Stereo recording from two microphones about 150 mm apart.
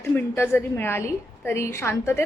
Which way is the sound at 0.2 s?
15° left (ahead or behind).